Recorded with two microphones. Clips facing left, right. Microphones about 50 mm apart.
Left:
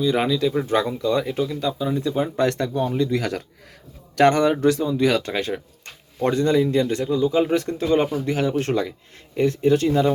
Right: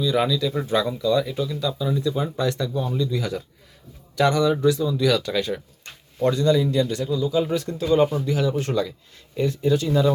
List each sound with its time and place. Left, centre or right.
0.0 s a man's voice: left
4.1 s a man's voice: left
4.9 s a man's voice: left